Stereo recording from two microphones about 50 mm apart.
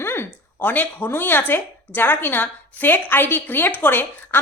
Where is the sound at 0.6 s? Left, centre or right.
Left.